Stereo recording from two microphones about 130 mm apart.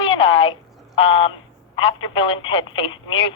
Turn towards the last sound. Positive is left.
turn(degrees=45)  # may be behind; listen again after turning